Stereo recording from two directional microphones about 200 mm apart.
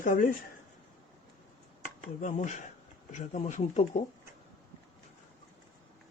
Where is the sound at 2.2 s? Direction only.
40° left (ahead or behind).